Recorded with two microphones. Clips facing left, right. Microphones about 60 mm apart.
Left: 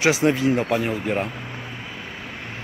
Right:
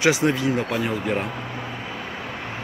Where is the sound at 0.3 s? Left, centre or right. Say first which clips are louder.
Left 2 dB; left.